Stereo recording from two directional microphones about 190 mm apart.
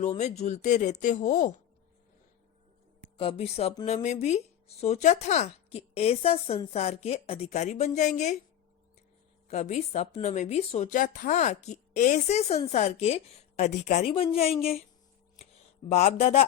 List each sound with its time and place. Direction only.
0.0 s speech: 40° left (ahead or behind)
3.2 s speech: 30° left (ahead or behind)
9.5 s speech: 35° left (ahead or behind)
15.4 s a sound: 35° left (ahead or behind)